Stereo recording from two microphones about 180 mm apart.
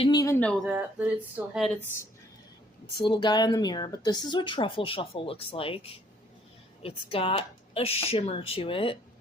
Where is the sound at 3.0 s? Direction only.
25° left (ahead or behind).